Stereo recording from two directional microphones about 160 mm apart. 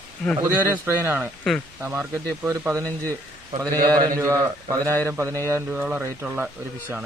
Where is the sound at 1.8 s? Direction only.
10° right (ahead or behind).